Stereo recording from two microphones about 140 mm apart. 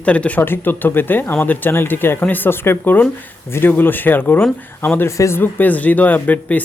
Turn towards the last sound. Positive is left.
turn(degrees=10)  # may be behind; listen again after turning